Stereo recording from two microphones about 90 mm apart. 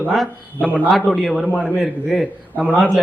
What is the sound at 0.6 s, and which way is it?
Speech, 15° right (ahead or behind).